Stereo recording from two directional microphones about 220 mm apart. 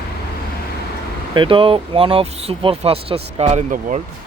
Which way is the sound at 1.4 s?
25° right (ahead or behind).